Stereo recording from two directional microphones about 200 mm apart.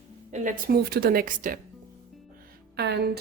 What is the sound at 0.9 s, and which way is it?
Speech, 50° right (ahead or behind).